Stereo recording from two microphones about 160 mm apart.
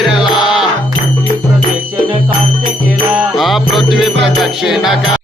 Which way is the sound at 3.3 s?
Centre (ahead or behind).